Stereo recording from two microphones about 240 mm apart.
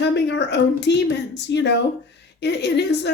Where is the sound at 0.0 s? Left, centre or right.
Left.